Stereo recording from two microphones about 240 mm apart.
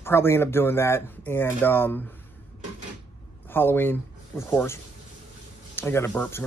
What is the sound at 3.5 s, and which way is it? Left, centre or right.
Speech, centre.